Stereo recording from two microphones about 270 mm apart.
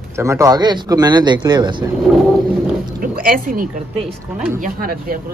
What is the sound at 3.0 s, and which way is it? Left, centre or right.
Speech, right.